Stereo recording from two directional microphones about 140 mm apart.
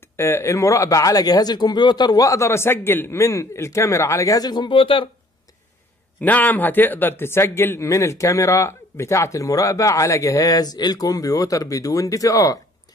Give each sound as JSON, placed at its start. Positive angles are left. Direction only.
{"t": 0.2, "sound": "a man's voice", "side_deg": 20}
{"t": 6.2, "sound": "a man's voice", "side_deg": 10}